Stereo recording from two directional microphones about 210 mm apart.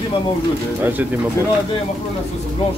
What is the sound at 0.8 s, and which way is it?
Speech, 10° right (ahead or behind).